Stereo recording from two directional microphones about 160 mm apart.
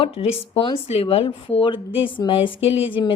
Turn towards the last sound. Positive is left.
turn(degrees=35)  # may be behind; listen again after turning